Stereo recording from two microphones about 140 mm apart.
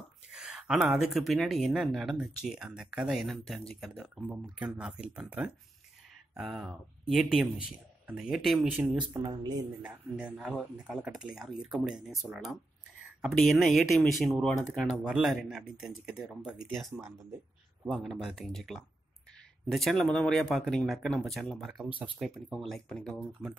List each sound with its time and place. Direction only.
0.3 s speech: 5° right (ahead or behind)
9.2 s speech: 30° right (ahead or behind)
9.8 s speech: 10° right (ahead or behind)
16.9 s speech: 20° right (ahead or behind)
17.9 s speech: centre (ahead or behind)
22.3 s speech: centre (ahead or behind)